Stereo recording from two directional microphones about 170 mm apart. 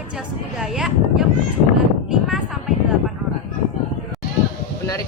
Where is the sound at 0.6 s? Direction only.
Centre (ahead or behind).